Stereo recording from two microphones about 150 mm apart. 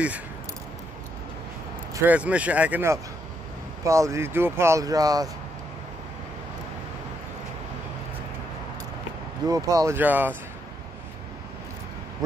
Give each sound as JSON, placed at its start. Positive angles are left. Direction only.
{"t": 2.0, "sound": "speech", "side_deg": -10}
{"t": 9.5, "sound": "speech", "side_deg": -25}